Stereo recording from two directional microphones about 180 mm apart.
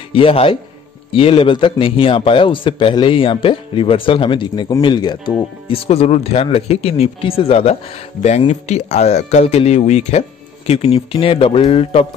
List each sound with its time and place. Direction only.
0.1 s a man's voice: 30° left (ahead or behind)